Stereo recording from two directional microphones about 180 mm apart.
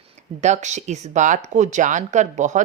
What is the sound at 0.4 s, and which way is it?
Speech, 40° right (ahead or behind).